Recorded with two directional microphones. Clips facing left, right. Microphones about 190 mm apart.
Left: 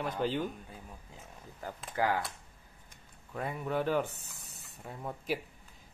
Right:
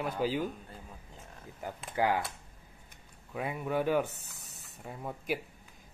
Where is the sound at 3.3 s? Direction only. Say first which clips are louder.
Right 1 dB; 5° right (ahead or behind).